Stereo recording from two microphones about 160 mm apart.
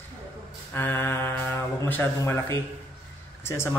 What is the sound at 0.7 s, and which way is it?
A man's voice, 15° left (ahead or behind).